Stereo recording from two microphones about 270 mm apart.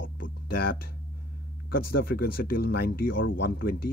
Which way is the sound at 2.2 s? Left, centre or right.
Left.